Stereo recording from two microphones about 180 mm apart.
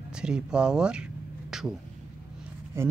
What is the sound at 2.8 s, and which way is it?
Speech, 15° right (ahead or behind).